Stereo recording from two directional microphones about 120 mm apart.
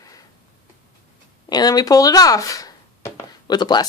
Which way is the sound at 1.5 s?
35° left (ahead or behind).